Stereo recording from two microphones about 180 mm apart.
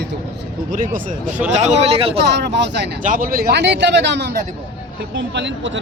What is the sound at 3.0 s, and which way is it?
Speech, 50° right (ahead or behind).